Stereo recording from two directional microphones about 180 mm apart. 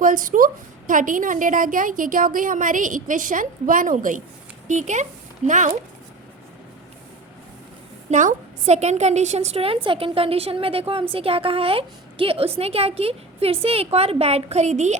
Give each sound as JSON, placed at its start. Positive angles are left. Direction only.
{"t": 0.0, "sound": "a woman's voice", "side_deg": -50}
{"t": 8.1, "sound": "a woman's voice", "side_deg": -45}